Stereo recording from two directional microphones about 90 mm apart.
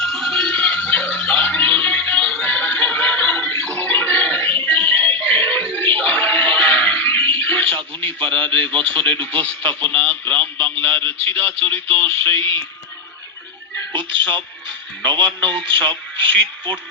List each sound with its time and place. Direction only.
0.1 s a sound: 5° left (ahead or behind)
0.9 s music: 20° left (ahead or behind)
7.3 s radio: 20° left (ahead or behind)
8.5 s speech: 15° left (ahead or behind)
13.9 s speech: 65° right (ahead or behind)
16.3 s speech: 15° left (ahead or behind)